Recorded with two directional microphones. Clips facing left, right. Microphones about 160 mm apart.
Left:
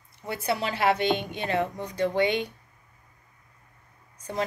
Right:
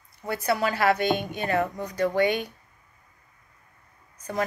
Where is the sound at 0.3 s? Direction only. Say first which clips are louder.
Right 3 dB; 25° left (ahead or behind).